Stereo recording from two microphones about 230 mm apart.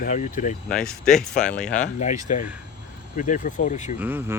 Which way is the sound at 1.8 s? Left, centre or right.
Left.